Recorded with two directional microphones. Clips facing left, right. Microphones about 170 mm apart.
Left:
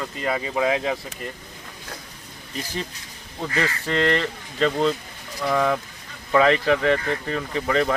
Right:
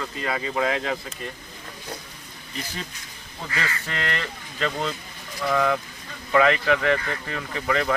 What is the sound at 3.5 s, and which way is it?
Speech, 35° left (ahead or behind).